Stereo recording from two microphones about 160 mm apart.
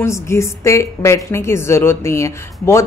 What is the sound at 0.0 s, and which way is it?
A woman's voice, 15° left (ahead or behind).